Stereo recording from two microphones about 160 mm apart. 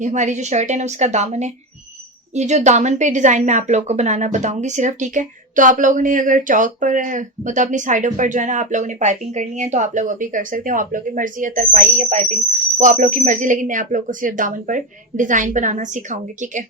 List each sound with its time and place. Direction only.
0.0 s a woman's voice: 50° right (ahead or behind)